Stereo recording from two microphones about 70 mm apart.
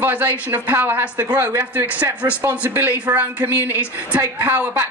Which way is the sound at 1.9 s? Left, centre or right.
Right.